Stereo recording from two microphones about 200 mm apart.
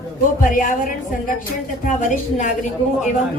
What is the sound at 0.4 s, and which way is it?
Speech, 40° left (ahead or behind).